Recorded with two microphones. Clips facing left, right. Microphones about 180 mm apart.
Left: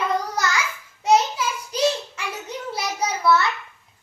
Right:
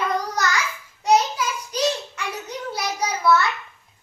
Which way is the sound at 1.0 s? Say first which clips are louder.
Even; 25° left (ahead or behind).